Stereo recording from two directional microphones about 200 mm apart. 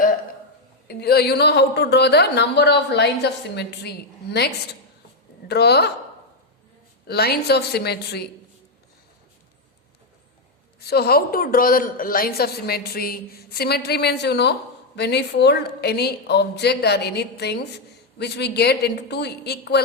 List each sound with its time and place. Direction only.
0.9 s a woman's voice: 55° left (ahead or behind)
7.1 s a woman's voice: 55° left (ahead or behind)
10.8 s a woman's voice: 50° left (ahead or behind)